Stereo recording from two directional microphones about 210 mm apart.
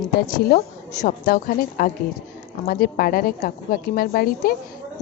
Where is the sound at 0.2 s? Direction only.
45° left (ahead or behind).